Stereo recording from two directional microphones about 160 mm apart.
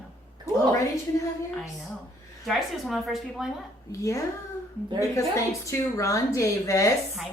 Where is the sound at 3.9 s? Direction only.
20° left (ahead or behind).